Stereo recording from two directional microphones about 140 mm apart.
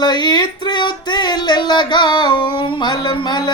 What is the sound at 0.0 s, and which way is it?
Music, 30° left (ahead or behind).